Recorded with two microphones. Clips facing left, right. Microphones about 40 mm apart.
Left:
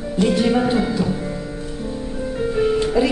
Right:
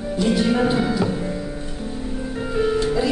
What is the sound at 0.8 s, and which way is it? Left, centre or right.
Music, centre.